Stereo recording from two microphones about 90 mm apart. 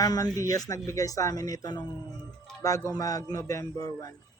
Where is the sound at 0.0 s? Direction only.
45° left (ahead or behind).